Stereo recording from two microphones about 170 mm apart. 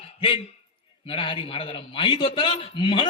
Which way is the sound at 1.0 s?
30° left (ahead or behind).